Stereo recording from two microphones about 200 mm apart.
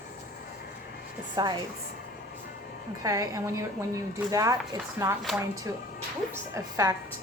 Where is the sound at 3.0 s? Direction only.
15° right (ahead or behind).